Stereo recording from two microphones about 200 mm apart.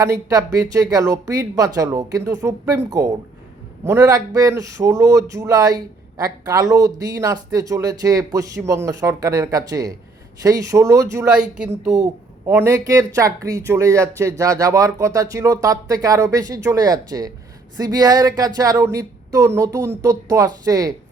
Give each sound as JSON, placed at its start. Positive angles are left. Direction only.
{"t": 0.0, "sound": "speech", "side_deg": -15}
{"t": 11.4, "sound": "speech", "side_deg": -5}